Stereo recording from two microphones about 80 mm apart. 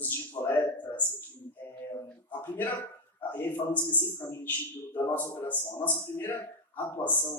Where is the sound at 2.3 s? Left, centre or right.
Left.